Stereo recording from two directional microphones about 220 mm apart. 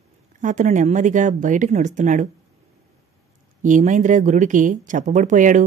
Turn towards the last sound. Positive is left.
turn(degrees=-35)  # may be behind; listen again after turning